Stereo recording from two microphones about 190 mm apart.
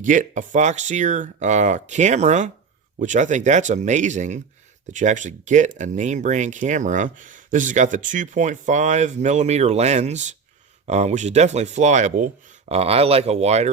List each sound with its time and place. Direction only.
0.0 s speech: 40° right (ahead or behind)